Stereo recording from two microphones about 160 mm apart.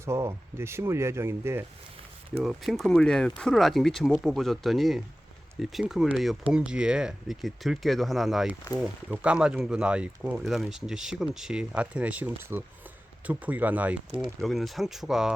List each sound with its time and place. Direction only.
0.0 s speech: 15° right (ahead or behind)
2.4 s speech: centre (ahead or behind)
14.1 s speech: 30° right (ahead or behind)
14.4 s speech: centre (ahead or behind)